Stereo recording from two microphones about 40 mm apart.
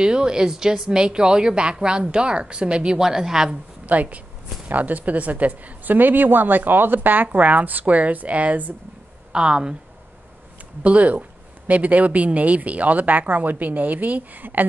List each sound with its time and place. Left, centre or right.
0.0 s speech: centre
3.0 s a woman's voice: centre
3.8 s a woman's voice: right
9.3 s speech: right
10.8 s speech: right